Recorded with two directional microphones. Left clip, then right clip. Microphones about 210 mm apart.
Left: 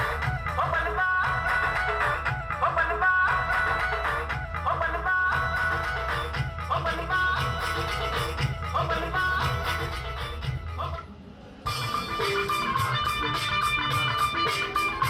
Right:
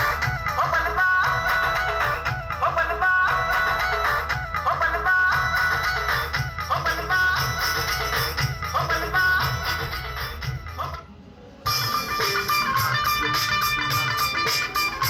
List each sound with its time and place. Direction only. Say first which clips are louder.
0.0 s music: right 5 dB; 25° right (ahead or behind)
11.8 s music: right 3 dB; 25° right (ahead or behind)